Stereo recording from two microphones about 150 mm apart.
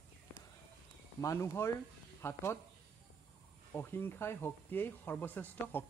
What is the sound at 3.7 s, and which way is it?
A man's voice, 15° left (ahead or behind).